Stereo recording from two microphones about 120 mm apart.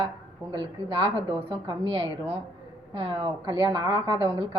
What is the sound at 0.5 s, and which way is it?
A woman's voice, 40° right (ahead or behind).